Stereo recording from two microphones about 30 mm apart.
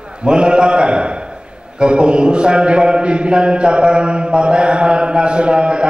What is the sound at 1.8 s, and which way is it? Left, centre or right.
A man's voice, right.